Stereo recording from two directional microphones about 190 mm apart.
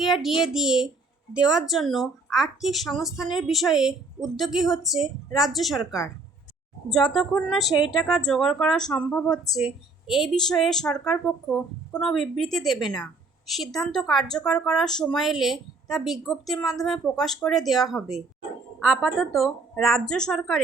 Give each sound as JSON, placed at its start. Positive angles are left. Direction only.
{"t": 0.0, "sound": "a child's voice", "side_deg": 0}